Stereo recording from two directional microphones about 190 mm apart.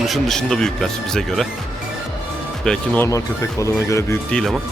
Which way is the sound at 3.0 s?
15° left (ahead or behind).